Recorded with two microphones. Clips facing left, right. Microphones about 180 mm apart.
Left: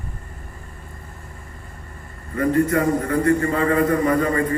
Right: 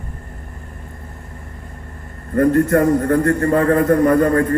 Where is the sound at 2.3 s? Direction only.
55° right (ahead or behind).